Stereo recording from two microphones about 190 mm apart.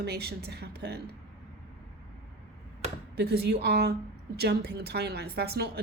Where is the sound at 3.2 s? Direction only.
60° right (ahead or behind).